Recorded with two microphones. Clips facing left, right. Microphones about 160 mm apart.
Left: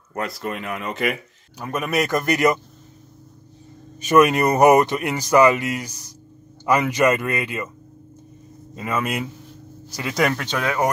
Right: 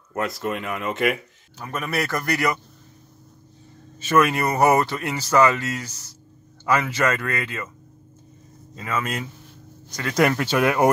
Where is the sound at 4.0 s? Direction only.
15° left (ahead or behind).